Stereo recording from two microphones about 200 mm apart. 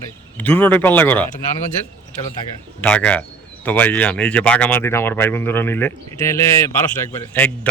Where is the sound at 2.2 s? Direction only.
30° left (ahead or behind).